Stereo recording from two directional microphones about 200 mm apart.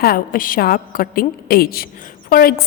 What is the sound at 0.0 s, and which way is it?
A woman's voice, 45° left (ahead or behind).